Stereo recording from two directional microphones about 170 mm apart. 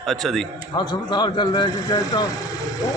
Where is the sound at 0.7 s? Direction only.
25° left (ahead or behind).